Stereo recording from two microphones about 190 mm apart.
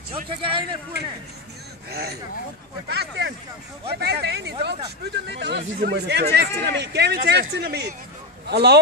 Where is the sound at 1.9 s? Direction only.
55° right (ahead or behind).